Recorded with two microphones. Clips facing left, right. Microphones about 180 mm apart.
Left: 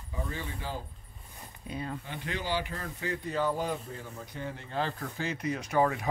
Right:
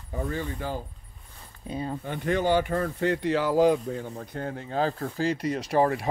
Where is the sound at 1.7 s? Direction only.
30° right (ahead or behind).